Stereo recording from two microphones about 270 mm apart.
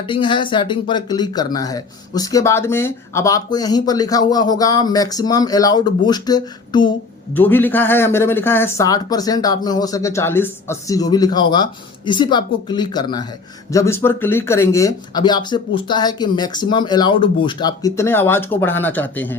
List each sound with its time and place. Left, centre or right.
0.0 s speech: centre